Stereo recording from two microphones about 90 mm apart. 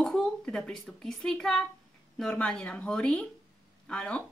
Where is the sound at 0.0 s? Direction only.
5° left (ahead or behind).